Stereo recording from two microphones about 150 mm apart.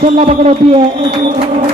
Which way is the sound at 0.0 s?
45° right (ahead or behind).